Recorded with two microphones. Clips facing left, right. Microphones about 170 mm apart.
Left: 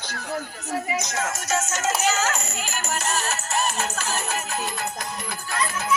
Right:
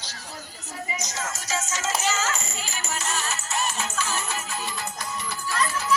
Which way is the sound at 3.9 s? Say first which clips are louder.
Left 2 dB; 45° left (ahead or behind).